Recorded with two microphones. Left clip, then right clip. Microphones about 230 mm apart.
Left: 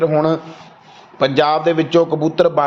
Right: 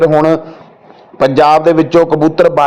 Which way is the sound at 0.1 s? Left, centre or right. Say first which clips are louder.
Right 6 dB; right.